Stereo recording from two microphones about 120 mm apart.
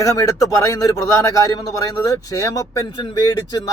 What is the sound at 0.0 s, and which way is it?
A man's voice, 30° left (ahead or behind).